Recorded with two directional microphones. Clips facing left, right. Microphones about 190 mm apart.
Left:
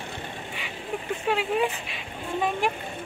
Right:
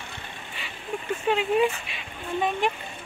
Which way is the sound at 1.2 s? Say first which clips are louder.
Right 3 dB; centre (ahead or behind).